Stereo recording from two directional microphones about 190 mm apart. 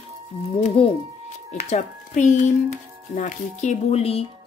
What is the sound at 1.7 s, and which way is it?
A woman's voice, 40° left (ahead or behind).